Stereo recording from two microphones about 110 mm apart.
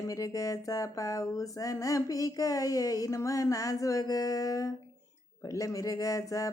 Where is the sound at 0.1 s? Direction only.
30° left (ahead or behind).